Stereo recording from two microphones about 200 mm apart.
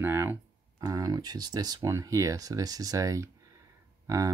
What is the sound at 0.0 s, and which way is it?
Speech, 10° right (ahead or behind).